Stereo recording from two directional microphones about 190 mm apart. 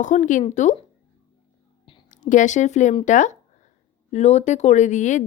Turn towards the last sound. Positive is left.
turn(degrees=40)  # may be behind; listen again after turning